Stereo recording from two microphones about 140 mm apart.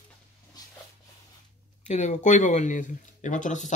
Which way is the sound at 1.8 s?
55° left (ahead or behind).